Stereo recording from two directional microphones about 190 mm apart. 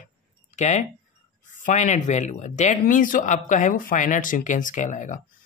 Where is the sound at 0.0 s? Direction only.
40° left (ahead or behind).